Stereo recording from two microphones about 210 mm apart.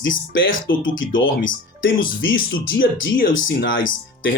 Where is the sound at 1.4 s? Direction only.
40° left (ahead or behind).